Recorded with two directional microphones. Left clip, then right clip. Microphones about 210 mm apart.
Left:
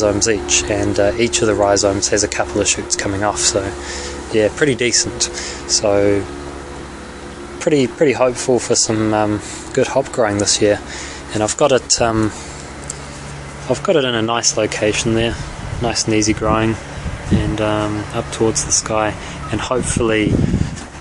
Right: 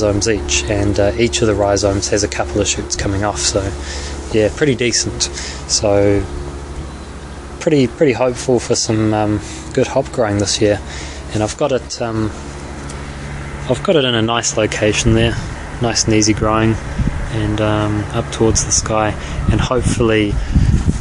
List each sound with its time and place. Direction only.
0.0 s speech: 5° left (ahead or behind)
7.6 s speech: centre (ahead or behind)
11.6 s speech: 40° left (ahead or behind)
13.7 s speech: centre (ahead or behind)